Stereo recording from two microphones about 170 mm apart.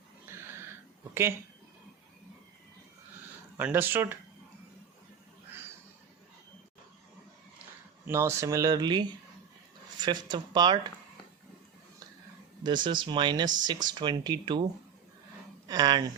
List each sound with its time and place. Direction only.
0.3 s a sound: 15° right (ahead or behind)
3.6 s speech: 10° right (ahead or behind)
8.0 s speech: 15° right (ahead or behind)
12.6 s speech: 25° right (ahead or behind)